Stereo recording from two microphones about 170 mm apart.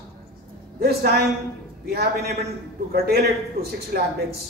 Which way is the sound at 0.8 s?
65° right (ahead or behind).